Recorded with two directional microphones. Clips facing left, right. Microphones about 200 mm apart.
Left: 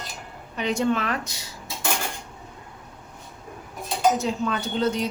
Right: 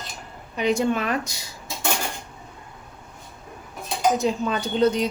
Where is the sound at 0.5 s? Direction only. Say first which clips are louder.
Right 2 dB; 10° right (ahead or behind).